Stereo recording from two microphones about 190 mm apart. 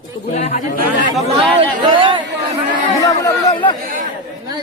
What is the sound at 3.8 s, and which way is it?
Speech, 45° right (ahead or behind).